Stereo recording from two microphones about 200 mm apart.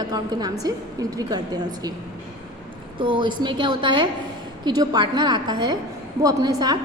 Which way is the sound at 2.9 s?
25° right (ahead or behind).